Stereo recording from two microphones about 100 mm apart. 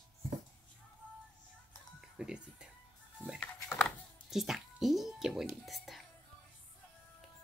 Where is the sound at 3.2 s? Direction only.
25° right (ahead or behind).